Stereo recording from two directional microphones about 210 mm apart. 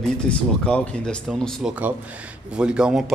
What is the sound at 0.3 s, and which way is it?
Speech, 5° left (ahead or behind).